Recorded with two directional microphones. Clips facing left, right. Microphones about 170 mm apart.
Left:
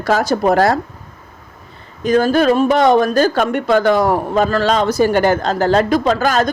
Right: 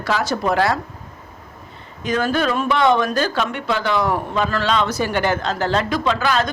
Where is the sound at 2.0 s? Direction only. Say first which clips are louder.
Left 7 dB; 35° left (ahead or behind).